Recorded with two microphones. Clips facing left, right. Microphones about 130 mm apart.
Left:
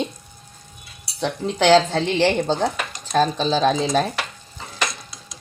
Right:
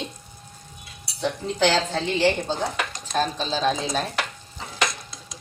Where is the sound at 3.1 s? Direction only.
90° left.